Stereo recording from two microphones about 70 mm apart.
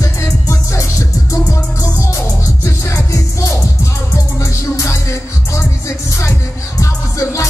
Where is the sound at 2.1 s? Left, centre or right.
Left.